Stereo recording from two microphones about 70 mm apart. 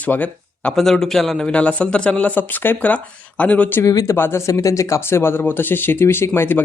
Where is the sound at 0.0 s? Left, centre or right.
Left.